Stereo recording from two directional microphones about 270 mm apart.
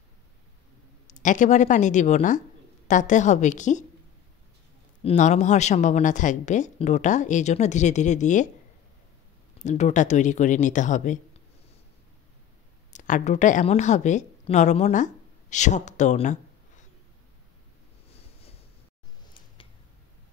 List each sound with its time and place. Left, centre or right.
1.0 s speech: left
5.0 s speech: left
9.6 s speech: left
12.9 s speech: left
18.1 s a sound: left